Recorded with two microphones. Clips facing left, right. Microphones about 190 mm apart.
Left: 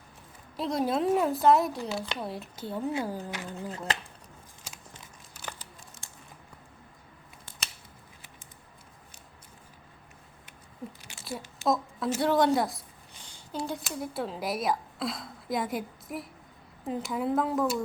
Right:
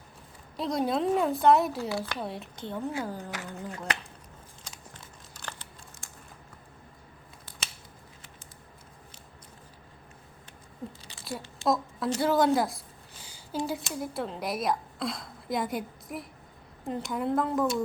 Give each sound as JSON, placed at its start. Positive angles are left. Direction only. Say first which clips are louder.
{"t": 0.5, "sound": "a woman's voice", "louder": "even", "side_deg": 0}
{"t": 1.9, "sound": "speech", "louder": "right 1 dB", "side_deg": 20}
{"t": 2.1, "sound": "a woman's voice", "louder": "even", "side_deg": 0}
{"t": 3.7, "sound": "speech", "louder": "even", "side_deg": 25}
{"t": 11.0, "sound": "a woman's voice", "louder": "left 1 dB", "side_deg": 0}